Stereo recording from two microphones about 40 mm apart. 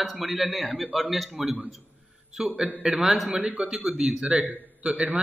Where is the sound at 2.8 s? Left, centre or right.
Centre.